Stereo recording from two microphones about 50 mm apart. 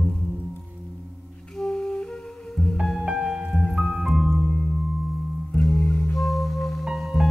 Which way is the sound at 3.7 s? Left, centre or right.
Centre.